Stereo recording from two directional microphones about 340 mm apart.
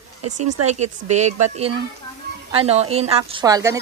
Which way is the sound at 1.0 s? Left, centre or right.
Centre.